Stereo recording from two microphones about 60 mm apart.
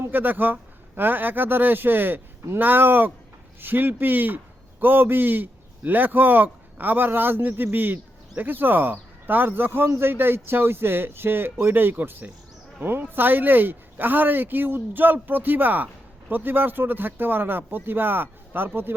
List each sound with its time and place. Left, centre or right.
0.1 s a man's voice: right